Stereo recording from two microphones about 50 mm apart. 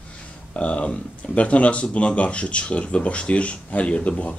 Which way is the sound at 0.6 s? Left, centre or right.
Left.